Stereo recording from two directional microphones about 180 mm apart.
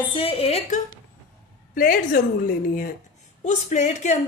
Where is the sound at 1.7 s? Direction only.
55° left (ahead or behind).